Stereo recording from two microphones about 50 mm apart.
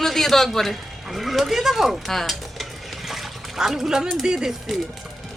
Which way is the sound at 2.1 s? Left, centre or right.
Centre.